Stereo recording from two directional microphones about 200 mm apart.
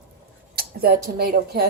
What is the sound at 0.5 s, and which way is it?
Speech, 50° right (ahead or behind).